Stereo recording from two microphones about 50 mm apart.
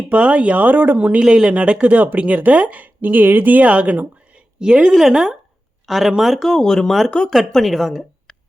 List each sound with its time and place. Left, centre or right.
0.1 s speech: right
1.2 s speech: centre
4.6 s speech: centre
6.4 s speech: centre